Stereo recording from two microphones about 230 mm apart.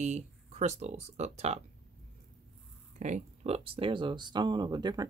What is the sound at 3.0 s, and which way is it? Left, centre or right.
Speech, right.